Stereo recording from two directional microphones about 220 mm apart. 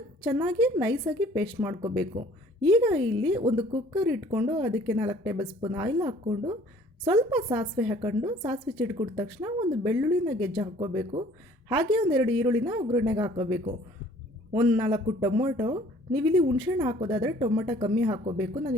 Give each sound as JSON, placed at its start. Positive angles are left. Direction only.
{"t": 0.3, "sound": "speech", "side_deg": -15}